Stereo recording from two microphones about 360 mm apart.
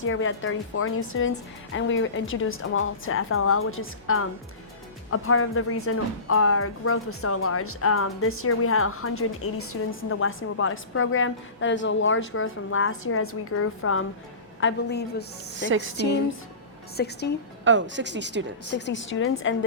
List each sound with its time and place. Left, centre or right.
0.0 s a woman's voice: left
15.5 s speech: right
17.0 s a woman's voice: left
17.7 s speech: right
18.7 s speech: left